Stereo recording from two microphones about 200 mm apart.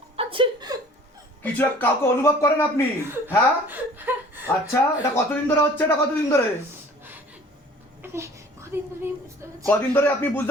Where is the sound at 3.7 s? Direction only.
10° right (ahead or behind).